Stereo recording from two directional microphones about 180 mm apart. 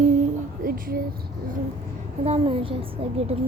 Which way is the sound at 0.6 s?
55° right (ahead or behind).